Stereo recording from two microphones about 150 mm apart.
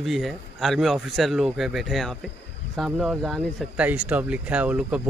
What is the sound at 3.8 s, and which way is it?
Speech, 10° right (ahead or behind).